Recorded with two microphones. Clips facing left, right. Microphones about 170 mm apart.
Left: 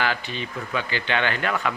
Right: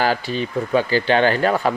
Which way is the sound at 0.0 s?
40° right (ahead or behind).